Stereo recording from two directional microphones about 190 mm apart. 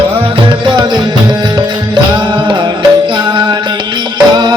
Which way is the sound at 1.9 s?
25° right (ahead or behind).